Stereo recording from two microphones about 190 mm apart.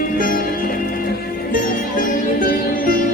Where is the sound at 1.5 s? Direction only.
50° left (ahead or behind).